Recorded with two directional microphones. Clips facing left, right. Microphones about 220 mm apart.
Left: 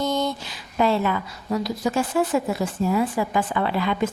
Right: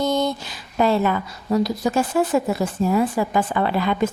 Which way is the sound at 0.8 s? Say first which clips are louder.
Right 2 dB; 45° right (ahead or behind).